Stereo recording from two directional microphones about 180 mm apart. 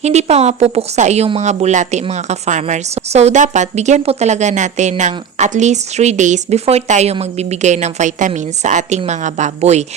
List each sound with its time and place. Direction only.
0.0 s a woman's voice: 40° right (ahead or behind)